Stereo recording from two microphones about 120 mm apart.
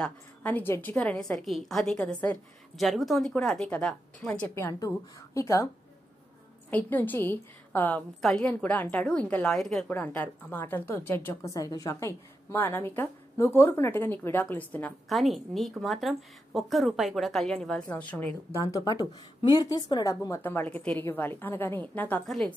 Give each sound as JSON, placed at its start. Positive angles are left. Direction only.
{"t": 0.0, "sound": "a woman's voice", "side_deg": 15}
{"t": 2.8, "sound": "a woman's voice", "side_deg": 0}
{"t": 4.6, "sound": "a woman's voice", "side_deg": 25}
{"t": 6.7, "sound": "a woman's voice", "side_deg": 15}
{"t": 9.8, "sound": "a woman's voice", "side_deg": 15}
{"t": 15.0, "sound": "a woman's voice", "side_deg": 0}
{"t": 18.9, "sound": "a woman's voice", "side_deg": 35}